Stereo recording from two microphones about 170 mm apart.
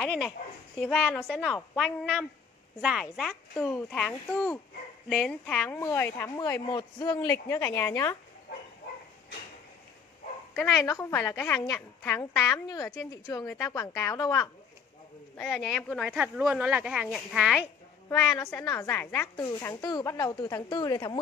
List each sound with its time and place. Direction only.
0.0 s a woman's voice: 5° left (ahead or behind)
10.5 s a woman's voice: 15° left (ahead or behind); by 17.6 s centre (ahead or behind)
18.4 s a woman's voice: 15° left (ahead or behind)